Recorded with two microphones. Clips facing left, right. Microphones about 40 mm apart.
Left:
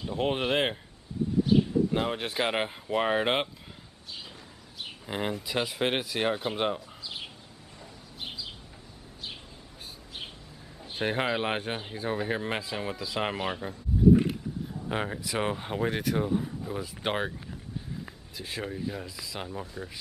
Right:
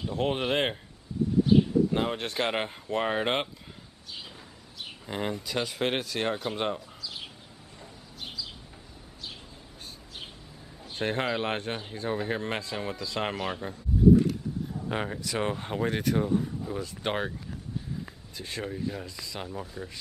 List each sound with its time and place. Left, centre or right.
0.0 s speech: centre
5.0 s speech: centre
7.0 s a sound: left
10.8 s speech: centre
14.0 s a sound: centre
14.9 s speech: centre
18.4 s speech: centre